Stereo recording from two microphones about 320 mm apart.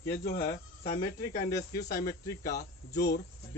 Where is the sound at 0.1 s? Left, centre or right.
Left.